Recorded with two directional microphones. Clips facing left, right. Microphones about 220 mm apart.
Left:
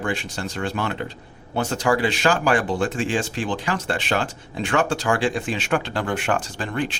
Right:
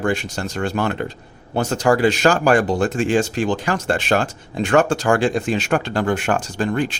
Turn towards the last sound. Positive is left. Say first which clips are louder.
# right 5 dB
turn(degrees=-45)  # may be behind; listen again after turning